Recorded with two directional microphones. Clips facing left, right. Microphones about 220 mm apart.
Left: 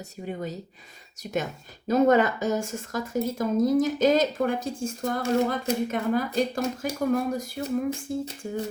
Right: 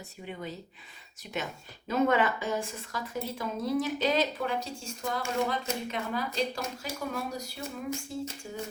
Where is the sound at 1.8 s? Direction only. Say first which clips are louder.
Left 6 dB; 40° left (ahead or behind).